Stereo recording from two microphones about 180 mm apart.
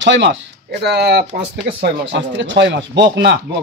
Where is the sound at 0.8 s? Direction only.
65° right (ahead or behind).